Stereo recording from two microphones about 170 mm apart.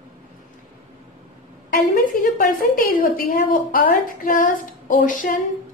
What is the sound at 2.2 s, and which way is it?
A woman's voice, 55° left (ahead or behind).